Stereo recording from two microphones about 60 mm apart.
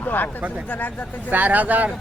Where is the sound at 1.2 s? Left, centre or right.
Right.